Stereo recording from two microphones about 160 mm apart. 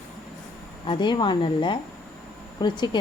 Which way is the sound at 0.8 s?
30° left (ahead or behind).